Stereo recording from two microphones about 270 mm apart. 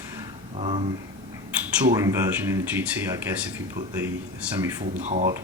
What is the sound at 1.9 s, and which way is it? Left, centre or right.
Speech, centre.